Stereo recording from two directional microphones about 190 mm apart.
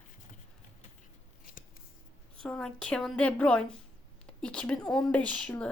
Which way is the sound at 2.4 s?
5° left (ahead or behind).